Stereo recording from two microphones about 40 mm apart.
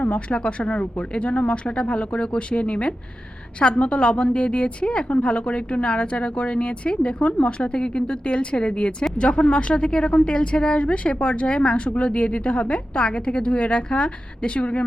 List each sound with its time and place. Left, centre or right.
0.0 s speech: left